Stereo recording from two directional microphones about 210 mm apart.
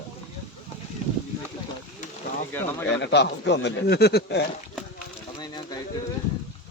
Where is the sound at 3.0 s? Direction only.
55° left (ahead or behind).